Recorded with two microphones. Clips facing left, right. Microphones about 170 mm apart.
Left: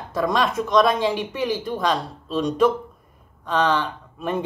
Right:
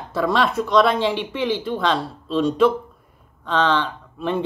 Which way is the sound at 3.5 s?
10° left (ahead or behind).